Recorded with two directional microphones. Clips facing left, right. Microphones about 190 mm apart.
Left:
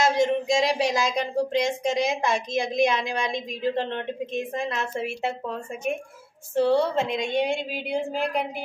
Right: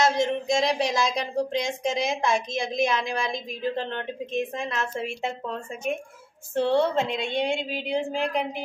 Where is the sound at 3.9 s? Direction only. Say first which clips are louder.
Left 1 dB; centre (ahead or behind).